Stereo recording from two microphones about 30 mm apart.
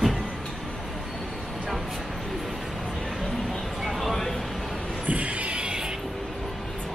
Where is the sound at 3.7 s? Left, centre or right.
Centre.